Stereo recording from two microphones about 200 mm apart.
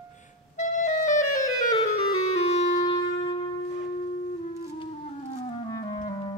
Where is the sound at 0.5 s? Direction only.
35° left (ahead or behind).